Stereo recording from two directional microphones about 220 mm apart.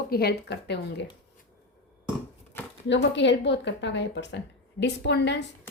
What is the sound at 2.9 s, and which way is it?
A woman's voice, 55° left (ahead or behind).